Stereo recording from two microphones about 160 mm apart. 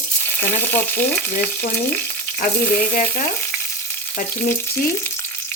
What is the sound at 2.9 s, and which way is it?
Frying, 55° left (ahead or behind).